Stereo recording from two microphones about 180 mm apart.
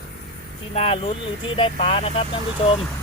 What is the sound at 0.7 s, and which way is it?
Speech, 35° left (ahead or behind).